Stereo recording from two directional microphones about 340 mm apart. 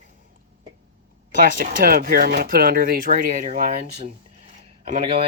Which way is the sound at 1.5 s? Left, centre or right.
Right.